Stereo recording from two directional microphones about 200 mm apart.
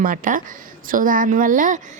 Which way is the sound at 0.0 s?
45° right (ahead or behind).